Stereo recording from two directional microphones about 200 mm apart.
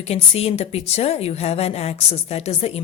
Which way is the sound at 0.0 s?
30° left (ahead or behind).